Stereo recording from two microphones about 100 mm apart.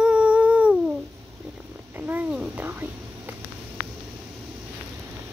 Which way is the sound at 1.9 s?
20° right (ahead or behind).